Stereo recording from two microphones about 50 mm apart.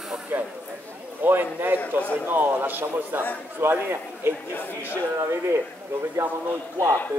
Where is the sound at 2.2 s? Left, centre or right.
Right.